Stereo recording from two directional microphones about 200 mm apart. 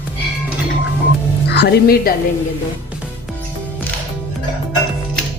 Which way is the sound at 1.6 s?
55° left (ahead or behind).